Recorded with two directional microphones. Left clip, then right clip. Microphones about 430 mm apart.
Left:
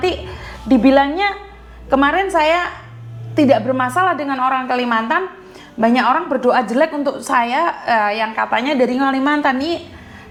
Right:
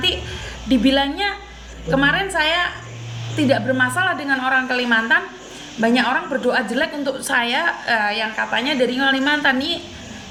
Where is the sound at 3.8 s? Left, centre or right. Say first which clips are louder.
Left 3 dB; left.